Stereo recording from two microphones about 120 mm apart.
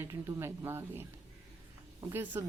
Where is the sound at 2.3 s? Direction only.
20° right (ahead or behind).